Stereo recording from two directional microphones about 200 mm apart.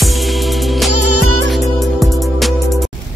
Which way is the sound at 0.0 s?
Centre (ahead or behind).